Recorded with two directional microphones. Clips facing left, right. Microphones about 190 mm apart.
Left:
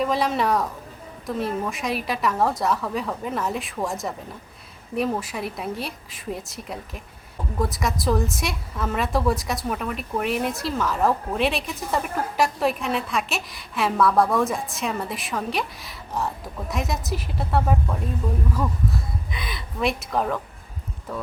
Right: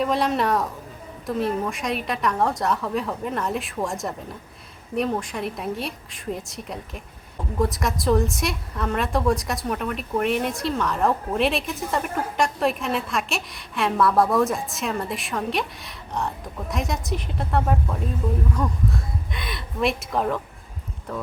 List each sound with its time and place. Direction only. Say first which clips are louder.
0.0 s a woman's voice: even; centre (ahead or behind)